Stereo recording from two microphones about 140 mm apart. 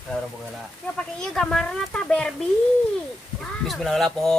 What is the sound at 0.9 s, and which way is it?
Speech, 5° left (ahead or behind).